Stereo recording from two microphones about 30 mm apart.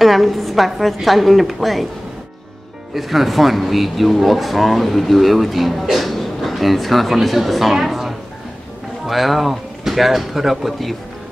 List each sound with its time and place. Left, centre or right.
0.0 s speech: centre
2.9 s speech: centre
9.1 s speech: centre